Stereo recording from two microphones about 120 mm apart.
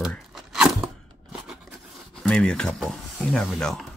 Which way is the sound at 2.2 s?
10° left (ahead or behind).